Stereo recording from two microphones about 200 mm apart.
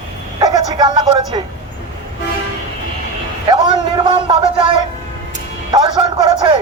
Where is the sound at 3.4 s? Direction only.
25° right (ahead or behind).